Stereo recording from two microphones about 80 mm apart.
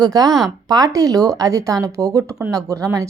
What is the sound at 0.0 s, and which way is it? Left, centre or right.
A woman's voice, right.